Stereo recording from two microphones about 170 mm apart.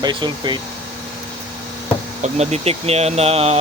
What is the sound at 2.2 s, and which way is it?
Speech, 40° right (ahead or behind).